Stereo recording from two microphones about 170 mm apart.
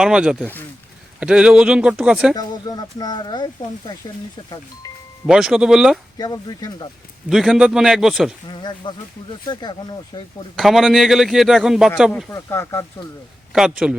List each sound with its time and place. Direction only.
0.0 s a man's voice: 5° right (ahead or behind)
2.3 s speech: 25° left (ahead or behind)
5.2 s a man's voice: 5° right (ahead or behind)
6.1 s speech: 25° left (ahead or behind)
7.3 s a man's voice: centre (ahead or behind)
8.4 s speech: 25° left (ahead or behind)
10.5 s a man's voice: centre (ahead or behind)
12.3 s speech: 15° left (ahead or behind)
13.5 s a man's voice: 5° right (ahead or behind)